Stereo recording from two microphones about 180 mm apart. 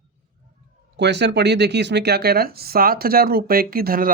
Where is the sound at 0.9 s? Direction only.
70° right (ahead or behind).